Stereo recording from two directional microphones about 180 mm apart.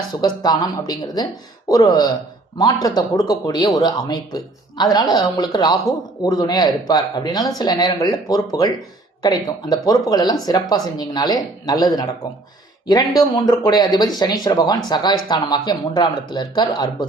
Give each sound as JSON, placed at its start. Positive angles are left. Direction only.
{"t": 0.2, "sound": "speech", "side_deg": 20}